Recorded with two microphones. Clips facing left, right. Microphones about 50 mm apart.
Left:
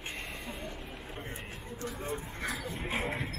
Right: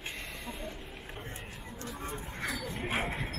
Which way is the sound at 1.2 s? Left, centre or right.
Left.